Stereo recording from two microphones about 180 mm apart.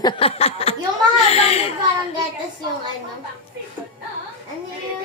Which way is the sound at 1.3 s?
35° left (ahead or behind).